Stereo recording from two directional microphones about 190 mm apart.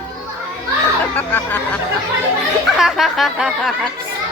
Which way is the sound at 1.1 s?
10° left (ahead or behind).